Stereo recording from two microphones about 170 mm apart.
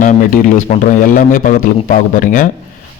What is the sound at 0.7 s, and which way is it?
A man's voice, 50° left (ahead or behind).